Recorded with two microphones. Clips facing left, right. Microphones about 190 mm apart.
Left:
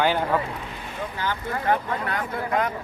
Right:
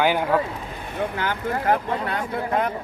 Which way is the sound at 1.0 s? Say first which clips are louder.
Right 6 dB; 65° right (ahead or behind).